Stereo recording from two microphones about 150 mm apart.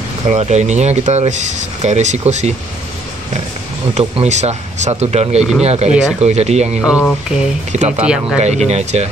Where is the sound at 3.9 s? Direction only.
45° right (ahead or behind).